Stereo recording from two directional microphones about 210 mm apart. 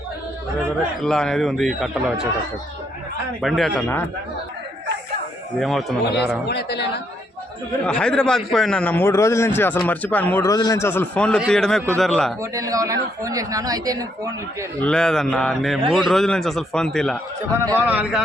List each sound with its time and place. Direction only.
1.0 s a man's voice: 5° left (ahead or behind)
3.4 s a man's voice: centre (ahead or behind)
5.5 s a man's voice: centre (ahead or behind)
6.5 s speech: 50° left (ahead or behind)
7.9 s a man's voice: 5° left (ahead or behind)
12.4 s speech: 15° right (ahead or behind)
14.8 s a man's voice: 5° left (ahead or behind)
17.5 s speech: 10° right (ahead or behind)